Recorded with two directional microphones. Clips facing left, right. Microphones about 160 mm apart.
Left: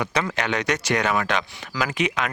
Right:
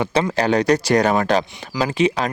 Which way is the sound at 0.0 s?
30° right (ahead or behind).